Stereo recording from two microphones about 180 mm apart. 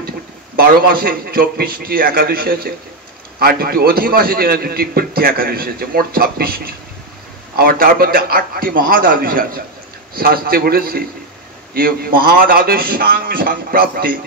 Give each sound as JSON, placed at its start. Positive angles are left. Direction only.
{"t": 0.6, "sound": "a man's voice", "side_deg": -55}